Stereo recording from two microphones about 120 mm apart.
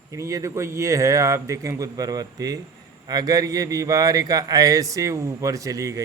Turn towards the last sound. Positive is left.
turn(degrees=-30)  # may be behind; listen again after turning